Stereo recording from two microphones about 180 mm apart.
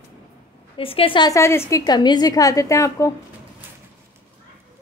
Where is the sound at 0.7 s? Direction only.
30° left (ahead or behind).